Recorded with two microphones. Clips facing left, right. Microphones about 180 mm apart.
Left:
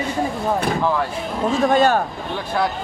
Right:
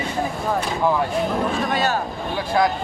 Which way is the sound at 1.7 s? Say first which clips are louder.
Left 6 dB; 50° left (ahead or behind).